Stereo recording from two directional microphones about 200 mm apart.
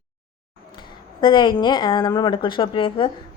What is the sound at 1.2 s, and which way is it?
A woman's voice, 25° left (ahead or behind).